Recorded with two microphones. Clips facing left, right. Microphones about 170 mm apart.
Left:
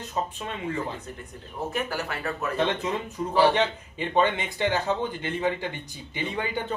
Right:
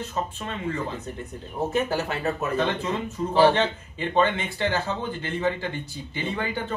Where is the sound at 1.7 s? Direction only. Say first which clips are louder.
Right 5 dB; 25° right (ahead or behind).